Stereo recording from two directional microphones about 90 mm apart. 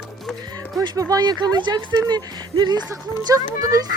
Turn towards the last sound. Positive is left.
turn(degrees=-45)  # may be behind; listen again after turning